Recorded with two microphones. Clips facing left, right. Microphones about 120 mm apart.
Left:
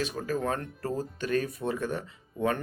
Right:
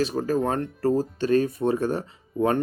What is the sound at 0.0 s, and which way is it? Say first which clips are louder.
Speech: right 7 dB; 40° right (ahead or behind).